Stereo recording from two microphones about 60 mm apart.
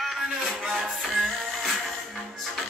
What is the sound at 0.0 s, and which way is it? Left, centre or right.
Music, centre.